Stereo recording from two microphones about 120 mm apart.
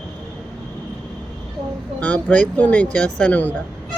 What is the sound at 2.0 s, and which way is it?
Speech, 10° left (ahead or behind).